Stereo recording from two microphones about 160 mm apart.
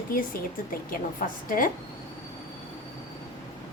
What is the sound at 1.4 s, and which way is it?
Speech, 60° left (ahead or behind).